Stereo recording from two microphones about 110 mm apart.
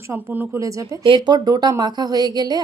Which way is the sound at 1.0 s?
45° right (ahead or behind).